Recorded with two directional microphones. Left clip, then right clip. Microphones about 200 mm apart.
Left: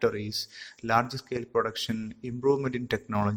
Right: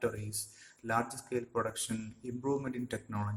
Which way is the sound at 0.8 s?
35° left (ahead or behind).